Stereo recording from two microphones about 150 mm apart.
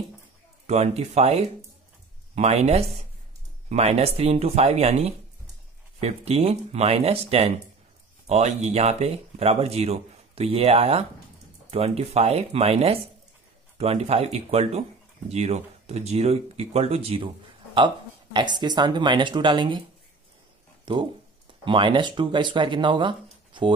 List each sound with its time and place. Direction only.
0.7 s speech: 45° right (ahead or behind)
20.8 s speech: 35° right (ahead or behind)